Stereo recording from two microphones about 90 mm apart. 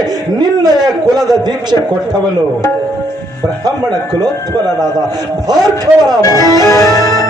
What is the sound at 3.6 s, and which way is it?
A man's voice, 45° right (ahead or behind).